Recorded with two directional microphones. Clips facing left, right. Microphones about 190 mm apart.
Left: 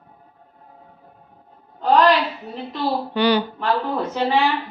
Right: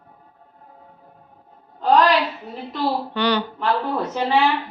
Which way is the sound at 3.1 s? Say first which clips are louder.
Left 5 dB; 10° left (ahead or behind).